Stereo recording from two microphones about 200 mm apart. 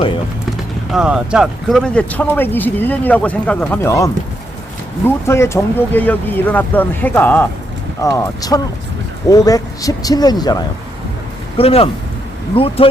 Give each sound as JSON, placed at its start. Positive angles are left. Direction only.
{"t": 0.9, "sound": "speech", "side_deg": -5}